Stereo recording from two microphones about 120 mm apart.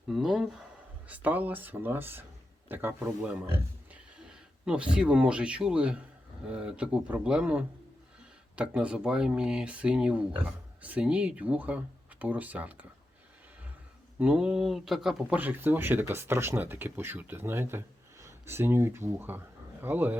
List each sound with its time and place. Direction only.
0.1 s speech: 5° right (ahead or behind)
14.2 s speech: 10° right (ahead or behind)